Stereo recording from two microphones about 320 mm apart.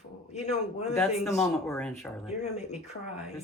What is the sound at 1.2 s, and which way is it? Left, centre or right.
Speech, centre.